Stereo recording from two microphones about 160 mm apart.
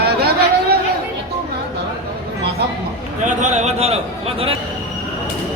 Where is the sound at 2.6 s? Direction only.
90° right.